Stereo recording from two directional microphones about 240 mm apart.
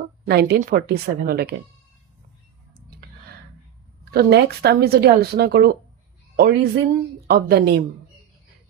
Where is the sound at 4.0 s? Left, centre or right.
Right.